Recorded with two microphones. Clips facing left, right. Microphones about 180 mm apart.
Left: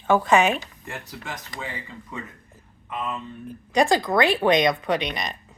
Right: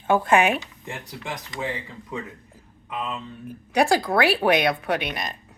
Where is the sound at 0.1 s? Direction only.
10° right (ahead or behind).